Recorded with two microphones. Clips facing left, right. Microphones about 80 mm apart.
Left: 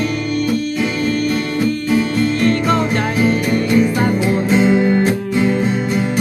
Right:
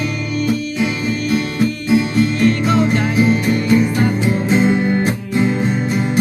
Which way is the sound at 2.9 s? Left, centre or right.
Centre.